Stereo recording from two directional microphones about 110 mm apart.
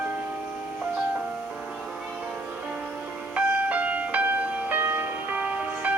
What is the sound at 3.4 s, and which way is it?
Music, 15° right (ahead or behind).